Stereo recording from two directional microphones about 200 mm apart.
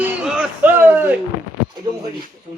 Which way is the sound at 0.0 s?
10° right (ahead or behind).